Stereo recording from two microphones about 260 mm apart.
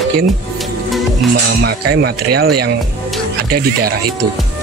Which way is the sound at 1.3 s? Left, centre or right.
Right.